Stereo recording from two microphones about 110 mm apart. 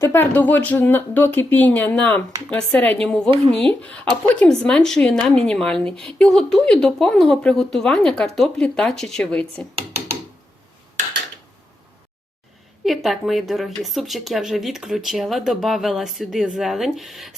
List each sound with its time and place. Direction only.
0.0 s speech: 20° left (ahead or behind)
3.2 s speech: 55° right (ahead or behind)
3.6 s speech: 10° left (ahead or behind)
12.8 s speech: centre (ahead or behind)